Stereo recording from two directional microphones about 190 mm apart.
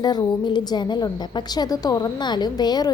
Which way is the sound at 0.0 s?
20° left (ahead or behind).